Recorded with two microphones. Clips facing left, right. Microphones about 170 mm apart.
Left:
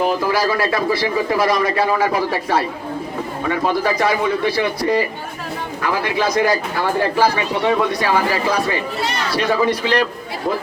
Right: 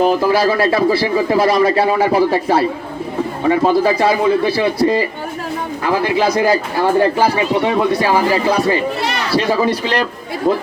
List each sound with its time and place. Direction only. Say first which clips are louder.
0.0 s speech: right 5 dB; 25° right (ahead or behind)